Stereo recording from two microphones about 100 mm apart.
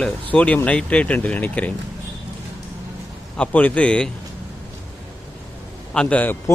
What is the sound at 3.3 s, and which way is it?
Speech, 15° left (ahead or behind).